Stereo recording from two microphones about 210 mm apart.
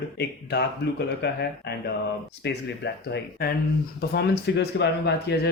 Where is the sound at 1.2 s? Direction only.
50° left (ahead or behind).